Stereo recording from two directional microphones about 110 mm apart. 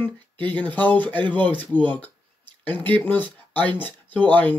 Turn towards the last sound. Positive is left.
turn(degrees=15)  # may be behind; listen again after turning